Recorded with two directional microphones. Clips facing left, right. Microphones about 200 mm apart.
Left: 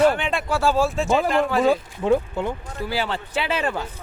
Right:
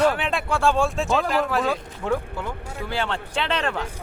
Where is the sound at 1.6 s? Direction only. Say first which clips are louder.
Left 6 dB; 25° left (ahead or behind).